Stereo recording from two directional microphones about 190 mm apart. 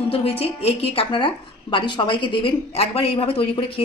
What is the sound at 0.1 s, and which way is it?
A woman's voice, 30° left (ahead or behind).